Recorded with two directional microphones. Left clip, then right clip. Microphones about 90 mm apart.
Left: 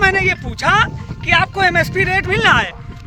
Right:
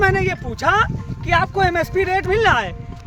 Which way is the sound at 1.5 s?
40° right (ahead or behind).